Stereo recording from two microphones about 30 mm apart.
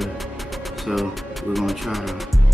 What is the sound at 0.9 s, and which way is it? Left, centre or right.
Speech, centre.